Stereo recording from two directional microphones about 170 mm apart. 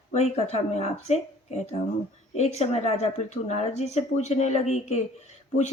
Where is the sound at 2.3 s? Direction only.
40° left (ahead or behind).